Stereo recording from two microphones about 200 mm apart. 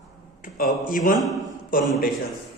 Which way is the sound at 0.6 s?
45° left (ahead or behind).